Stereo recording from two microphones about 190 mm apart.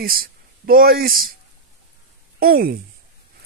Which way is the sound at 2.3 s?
50° right (ahead or behind).